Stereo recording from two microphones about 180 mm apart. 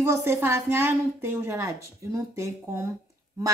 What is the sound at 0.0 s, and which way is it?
A woman's voice, 15° right (ahead or behind).